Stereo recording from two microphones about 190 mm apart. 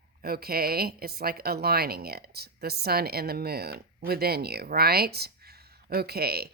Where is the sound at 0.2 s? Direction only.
55° right (ahead or behind).